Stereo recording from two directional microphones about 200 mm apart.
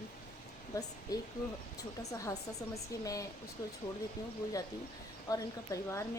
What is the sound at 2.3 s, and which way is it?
Speech, 15° left (ahead or behind).